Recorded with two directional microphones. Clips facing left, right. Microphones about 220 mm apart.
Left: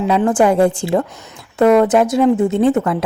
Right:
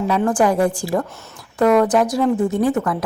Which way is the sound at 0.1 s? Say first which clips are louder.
Left 4 dB; 20° left (ahead or behind).